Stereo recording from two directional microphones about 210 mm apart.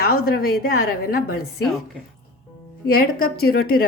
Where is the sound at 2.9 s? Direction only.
45° left (ahead or behind).